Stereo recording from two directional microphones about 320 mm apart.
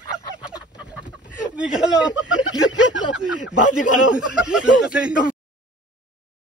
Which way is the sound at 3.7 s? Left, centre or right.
Centre.